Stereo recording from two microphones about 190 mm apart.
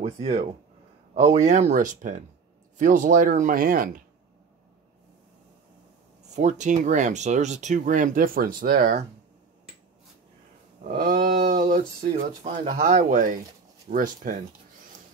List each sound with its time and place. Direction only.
0.0 s speech: 30° right (ahead or behind); by 4.0 s 45° right (ahead or behind)
6.3 s speech: 40° right (ahead or behind)
10.8 s speech: 45° right (ahead or behind)